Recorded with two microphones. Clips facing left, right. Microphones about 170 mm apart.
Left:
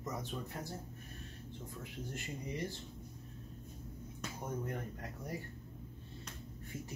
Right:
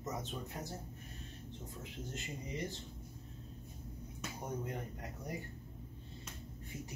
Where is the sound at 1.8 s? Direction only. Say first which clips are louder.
Left 1 dB; 20° right (ahead or behind).